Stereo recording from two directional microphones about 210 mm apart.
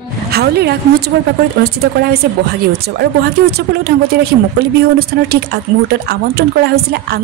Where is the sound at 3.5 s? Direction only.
50° right (ahead or behind).